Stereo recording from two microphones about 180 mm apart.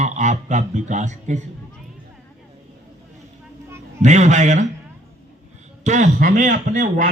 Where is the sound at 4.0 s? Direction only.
40° right (ahead or behind).